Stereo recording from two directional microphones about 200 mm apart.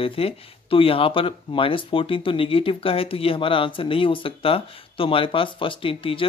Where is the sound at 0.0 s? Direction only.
30° left (ahead or behind).